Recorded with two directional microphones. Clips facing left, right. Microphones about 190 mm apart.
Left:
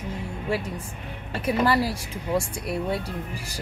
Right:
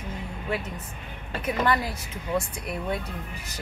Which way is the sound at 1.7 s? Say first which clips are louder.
Left 3 dB; 35° left (ahead or behind).